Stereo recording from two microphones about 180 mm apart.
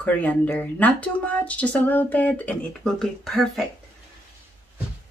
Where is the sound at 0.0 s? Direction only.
10° left (ahead or behind).